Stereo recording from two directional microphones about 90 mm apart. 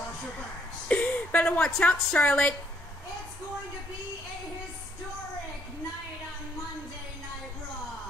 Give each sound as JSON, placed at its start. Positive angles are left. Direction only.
{"t": 0.8, "sound": "a woman's voice", "side_deg": 15}